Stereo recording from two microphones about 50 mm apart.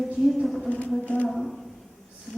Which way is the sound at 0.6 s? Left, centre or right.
Left.